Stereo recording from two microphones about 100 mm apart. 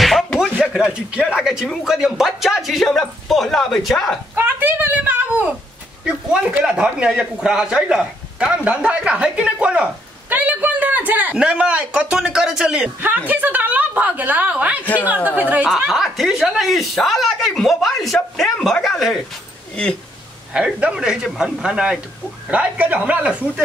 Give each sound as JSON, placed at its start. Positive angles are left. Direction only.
{"t": 0.6, "sound": "speech", "side_deg": -10}
{"t": 4.4, "sound": "a sound", "side_deg": -20}
{"t": 7.1, "sound": "a man's voice", "side_deg": -10}
{"t": 10.3, "sound": "a sound", "side_deg": -15}
{"t": 13.3, "sound": "a woman's voice", "side_deg": -15}
{"t": 15.9, "sound": "speech", "side_deg": 0}
{"t": 19.7, "sound": "speech", "side_deg": 10}
{"t": 20.5, "sound": "a man's voice", "side_deg": -10}